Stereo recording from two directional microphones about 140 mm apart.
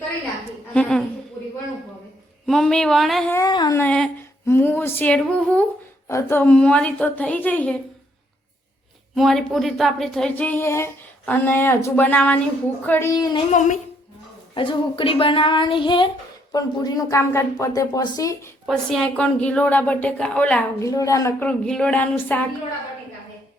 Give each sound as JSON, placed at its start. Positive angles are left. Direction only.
{"t": 0.7, "sound": "a sound", "side_deg": 5}
{"t": 2.5, "sound": "speech", "side_deg": 5}
{"t": 3.4, "sound": "speech", "side_deg": 30}
{"t": 3.8, "sound": "speech", "side_deg": 10}
{"t": 6.1, "sound": "speech", "side_deg": 20}
{"t": 9.1, "sound": "speech", "side_deg": 0}
{"t": 13.5, "sound": "speech", "side_deg": 60}
{"t": 14.5, "sound": "speech", "side_deg": 35}
{"t": 18.6, "sound": "speech", "side_deg": 0}
{"t": 20.8, "sound": "speech", "side_deg": 25}
{"t": 21.4, "sound": "speech", "side_deg": 5}